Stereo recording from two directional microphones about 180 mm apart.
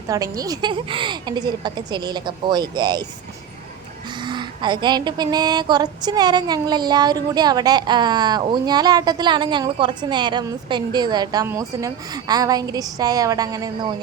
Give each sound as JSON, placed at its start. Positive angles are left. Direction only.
{"t": 0.1, "sound": "speech", "side_deg": -20}
{"t": 4.2, "sound": "speech", "side_deg": -25}